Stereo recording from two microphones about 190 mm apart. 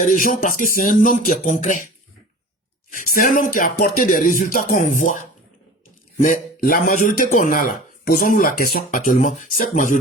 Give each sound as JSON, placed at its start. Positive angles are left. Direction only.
{"t": 0.0, "sound": "speech", "side_deg": 45}
{"t": 2.9, "sound": "speech", "side_deg": 45}